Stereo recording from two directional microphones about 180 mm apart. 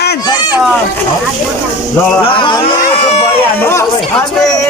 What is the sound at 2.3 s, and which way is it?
Speech, 25° left (ahead or behind).